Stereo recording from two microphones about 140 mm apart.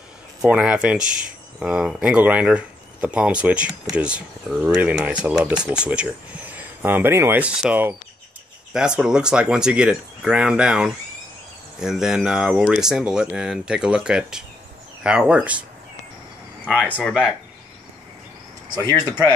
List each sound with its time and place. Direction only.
0.4 s speech: 10° right (ahead or behind)
16.6 s speech: 10° left (ahead or behind)
18.8 s speech: 30° right (ahead or behind)